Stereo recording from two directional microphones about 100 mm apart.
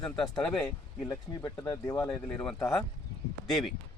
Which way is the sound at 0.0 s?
10° left (ahead or behind).